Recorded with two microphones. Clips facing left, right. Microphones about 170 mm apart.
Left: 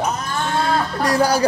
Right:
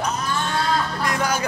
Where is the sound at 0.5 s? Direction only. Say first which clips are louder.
Left 5 dB; 35° left (ahead or behind).